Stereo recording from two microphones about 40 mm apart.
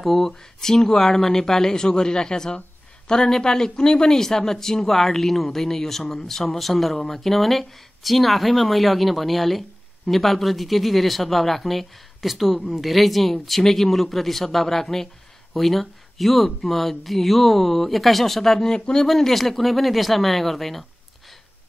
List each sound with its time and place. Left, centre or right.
0.0 s speech: centre
18.7 s speech: centre
19.0 s speech: centre